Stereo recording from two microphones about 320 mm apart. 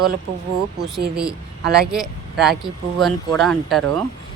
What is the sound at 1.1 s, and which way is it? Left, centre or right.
Speech, centre.